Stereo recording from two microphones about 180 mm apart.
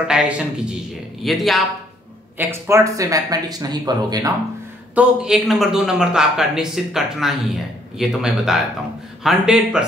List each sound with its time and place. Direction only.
0.1 s a man's voice: 5° right (ahead or behind)
2.3 s speech: 15° right (ahead or behind)
4.9 s a man's voice: 5° right (ahead or behind)